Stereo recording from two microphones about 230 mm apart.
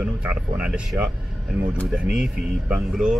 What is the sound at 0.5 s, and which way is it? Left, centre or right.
Speech, centre.